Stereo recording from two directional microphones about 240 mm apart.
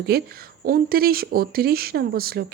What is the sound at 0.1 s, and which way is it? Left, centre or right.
Speech, right.